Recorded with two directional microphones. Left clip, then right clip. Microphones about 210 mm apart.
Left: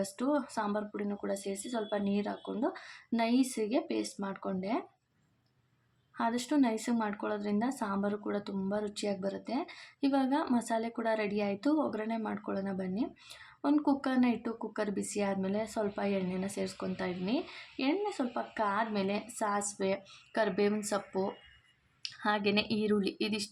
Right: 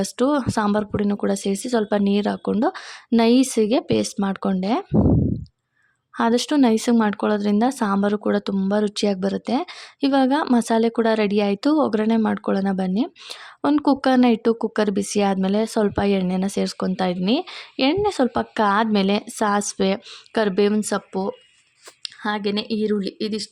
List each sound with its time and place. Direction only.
0.0 s speech: 50° right (ahead or behind)
6.1 s speech: 50° right (ahead or behind); by 23.5 s 25° right (ahead or behind)